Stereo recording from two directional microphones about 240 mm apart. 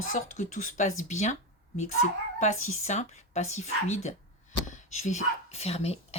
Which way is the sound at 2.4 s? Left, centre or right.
Left.